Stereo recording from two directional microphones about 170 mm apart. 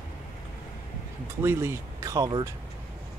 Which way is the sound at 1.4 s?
15° right (ahead or behind).